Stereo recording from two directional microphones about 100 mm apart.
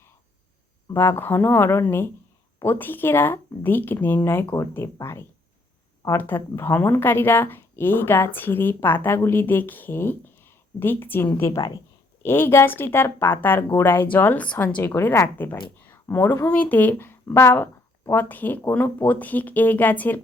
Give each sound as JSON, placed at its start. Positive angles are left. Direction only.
{"t": 0.9, "sound": "a woman's voice", "side_deg": 25}
{"t": 15.9, "sound": "a sound", "side_deg": 20}
{"t": 16.5, "sound": "speech", "side_deg": 15}